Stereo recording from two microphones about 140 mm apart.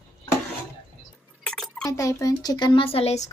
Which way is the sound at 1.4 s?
5° left (ahead or behind).